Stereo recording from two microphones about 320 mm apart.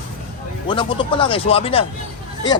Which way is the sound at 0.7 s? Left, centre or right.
Centre.